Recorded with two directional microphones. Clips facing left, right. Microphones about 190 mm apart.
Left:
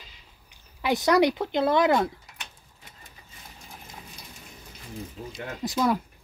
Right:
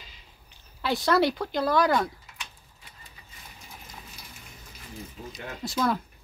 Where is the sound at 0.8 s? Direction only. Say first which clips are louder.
Left 2 dB; 15° left (ahead or behind).